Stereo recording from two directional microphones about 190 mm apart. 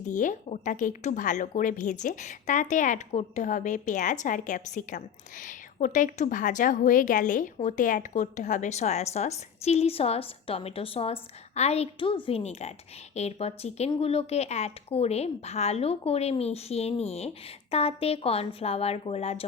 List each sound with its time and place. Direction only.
0.0 s speech: 40° left (ahead or behind)